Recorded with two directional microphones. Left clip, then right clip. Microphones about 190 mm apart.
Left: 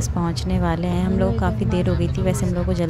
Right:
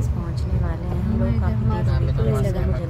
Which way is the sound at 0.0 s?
45° left (ahead or behind).